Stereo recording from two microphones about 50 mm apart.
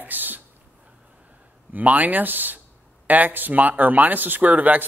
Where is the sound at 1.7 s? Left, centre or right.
Right.